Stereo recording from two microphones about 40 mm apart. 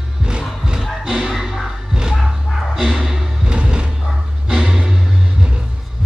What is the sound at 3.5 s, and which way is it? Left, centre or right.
Music, right.